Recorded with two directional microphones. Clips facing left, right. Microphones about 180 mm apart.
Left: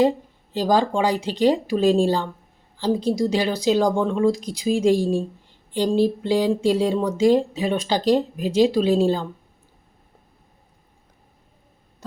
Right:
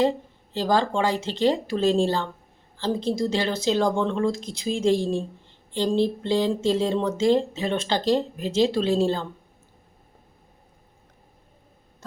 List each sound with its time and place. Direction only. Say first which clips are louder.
0.5 s speech: left 3 dB; 15° left (ahead or behind)